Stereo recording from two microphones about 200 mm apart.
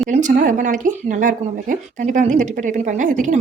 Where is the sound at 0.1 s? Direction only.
40° right (ahead or behind).